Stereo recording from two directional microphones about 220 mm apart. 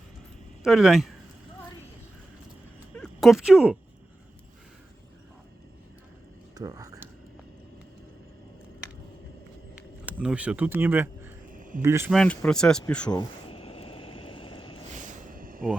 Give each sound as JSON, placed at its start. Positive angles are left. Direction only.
{"t": 0.6, "sound": "speech", "side_deg": 0}
{"t": 2.9, "sound": "speech", "side_deg": 0}
{"t": 6.5, "sound": "a sound", "side_deg": -15}
{"t": 10.1, "sound": "speech", "side_deg": -5}
{"t": 11.5, "sound": "a sound", "side_deg": -35}
{"t": 11.8, "sound": "speech", "side_deg": -10}
{"t": 12.1, "sound": "speech", "side_deg": 5}
{"t": 13.1, "sound": "vehicle", "side_deg": 20}
{"t": 14.9, "sound": "vehicle", "side_deg": -35}